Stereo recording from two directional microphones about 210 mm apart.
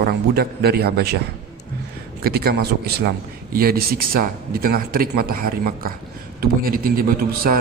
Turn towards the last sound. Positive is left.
turn(degrees=-45)  # may be behind; listen again after turning